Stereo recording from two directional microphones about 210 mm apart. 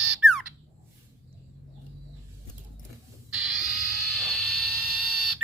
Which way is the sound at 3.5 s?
Centre (ahead or behind).